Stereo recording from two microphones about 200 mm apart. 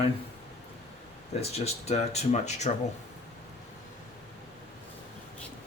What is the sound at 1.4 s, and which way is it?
Speech, 30° left (ahead or behind).